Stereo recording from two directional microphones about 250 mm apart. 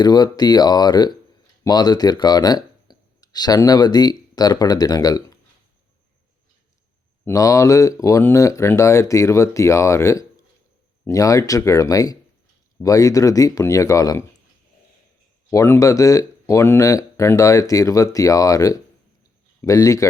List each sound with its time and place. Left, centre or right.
0.0 s speech: centre
7.3 s speech: centre
15.4 s speech: centre